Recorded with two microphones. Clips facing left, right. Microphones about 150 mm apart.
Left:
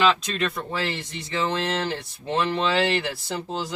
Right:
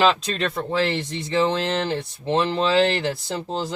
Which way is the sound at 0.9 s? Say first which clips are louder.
Right 6 dB; 20° right (ahead or behind).